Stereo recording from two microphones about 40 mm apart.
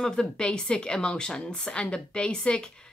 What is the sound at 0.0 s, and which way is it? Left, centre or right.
Speech, centre.